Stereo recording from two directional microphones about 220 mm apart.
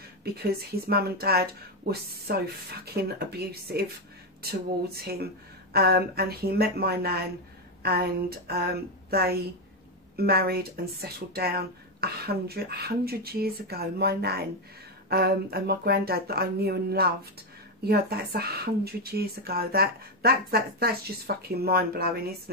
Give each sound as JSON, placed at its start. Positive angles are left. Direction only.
{"t": 0.2, "sound": "speech", "side_deg": -45}